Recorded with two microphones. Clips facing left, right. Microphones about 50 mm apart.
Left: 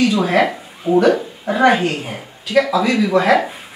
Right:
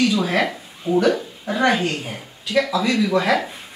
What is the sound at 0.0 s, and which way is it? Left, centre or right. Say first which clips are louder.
Speech: left 4 dB; centre.